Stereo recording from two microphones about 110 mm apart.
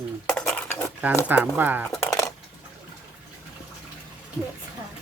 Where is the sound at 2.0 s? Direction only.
30° left (ahead or behind).